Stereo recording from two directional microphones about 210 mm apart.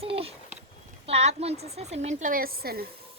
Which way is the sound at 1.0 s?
30° right (ahead or behind).